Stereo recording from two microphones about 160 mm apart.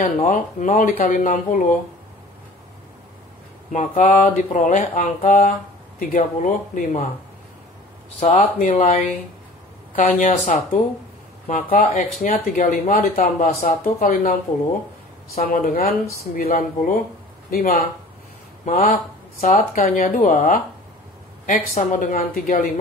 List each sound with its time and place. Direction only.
0.0 s speech: 55° left (ahead or behind)
3.7 s speech: 50° left (ahead or behind)
8.2 s speech: 55° left (ahead or behind)
13.2 s speech: 65° left (ahead or behind)
15.3 s speech: 65° left (ahead or behind)
21.7 s speech: 55° left (ahead or behind)